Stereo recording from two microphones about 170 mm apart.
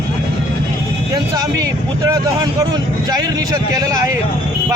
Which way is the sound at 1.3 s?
20° right (ahead or behind).